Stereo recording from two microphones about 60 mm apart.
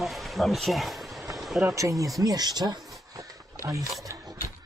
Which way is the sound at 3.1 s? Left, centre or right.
Right.